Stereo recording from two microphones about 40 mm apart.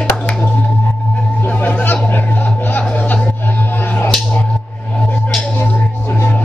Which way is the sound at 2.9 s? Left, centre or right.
Left.